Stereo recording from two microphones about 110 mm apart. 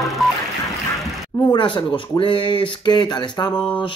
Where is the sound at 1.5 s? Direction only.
45° left (ahead or behind).